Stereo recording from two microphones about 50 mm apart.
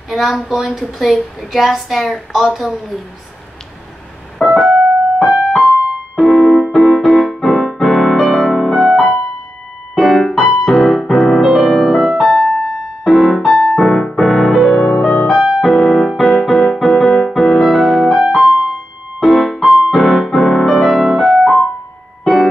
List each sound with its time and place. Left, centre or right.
0.1 s a woman's voice: centre
4.6 s keyboard: centre
6.7 s music: centre
12.3 s music: centre
15.0 s keyboard: centre
22.2 s music: centre